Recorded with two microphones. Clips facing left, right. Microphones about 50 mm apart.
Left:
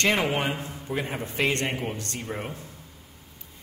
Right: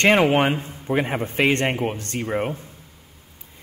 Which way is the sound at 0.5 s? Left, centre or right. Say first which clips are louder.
Right 7 dB; right.